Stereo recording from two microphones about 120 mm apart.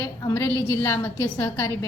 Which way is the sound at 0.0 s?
25° left (ahead or behind).